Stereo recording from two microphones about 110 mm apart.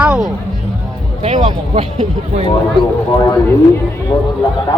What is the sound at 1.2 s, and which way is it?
Speech, 60° right (ahead or behind).